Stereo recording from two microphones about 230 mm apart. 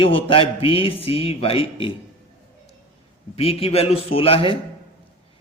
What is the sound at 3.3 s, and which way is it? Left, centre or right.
Speech, left.